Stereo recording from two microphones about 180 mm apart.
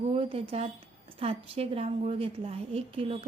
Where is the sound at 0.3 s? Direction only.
35° right (ahead or behind).